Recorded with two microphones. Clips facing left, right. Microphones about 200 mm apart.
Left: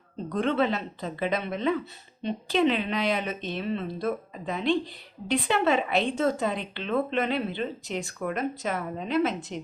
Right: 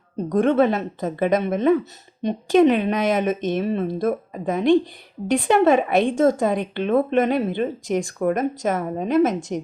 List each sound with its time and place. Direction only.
0.2 s speech: 45° right (ahead or behind)